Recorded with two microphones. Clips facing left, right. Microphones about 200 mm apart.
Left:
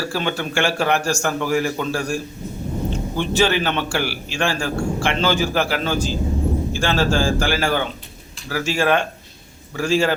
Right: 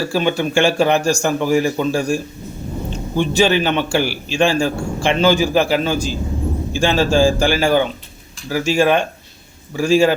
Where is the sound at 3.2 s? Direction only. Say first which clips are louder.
Right 4 dB; 15° right (ahead or behind).